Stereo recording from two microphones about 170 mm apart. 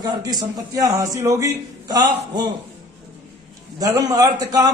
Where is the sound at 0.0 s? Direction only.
25° right (ahead or behind).